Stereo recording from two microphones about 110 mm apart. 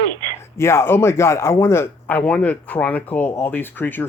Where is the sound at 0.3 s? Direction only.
25° left (ahead or behind).